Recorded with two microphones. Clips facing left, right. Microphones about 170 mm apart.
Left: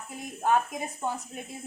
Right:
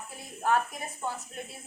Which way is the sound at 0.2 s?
15° left (ahead or behind).